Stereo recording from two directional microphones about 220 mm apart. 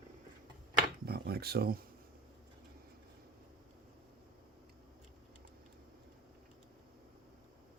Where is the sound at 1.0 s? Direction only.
45° right (ahead or behind).